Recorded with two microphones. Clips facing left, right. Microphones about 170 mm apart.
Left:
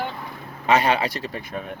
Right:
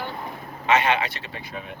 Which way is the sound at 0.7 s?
35° left (ahead or behind).